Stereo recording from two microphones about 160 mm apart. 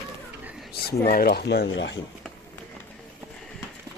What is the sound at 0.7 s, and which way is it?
Speech, 75° left (ahead or behind).